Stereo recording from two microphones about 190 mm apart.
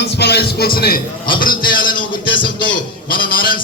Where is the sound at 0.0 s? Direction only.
60° left (ahead or behind).